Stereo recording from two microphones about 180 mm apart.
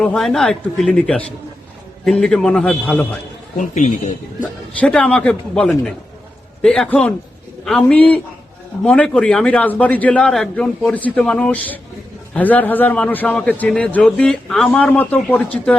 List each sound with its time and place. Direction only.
0.0 s a man's voice: 5° left (ahead or behind)
3.6 s a man's voice: 45° left (ahead or behind)
4.8 s a man's voice: 5° left (ahead or behind)